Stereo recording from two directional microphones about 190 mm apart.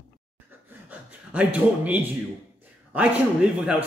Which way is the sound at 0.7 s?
10° right (ahead or behind).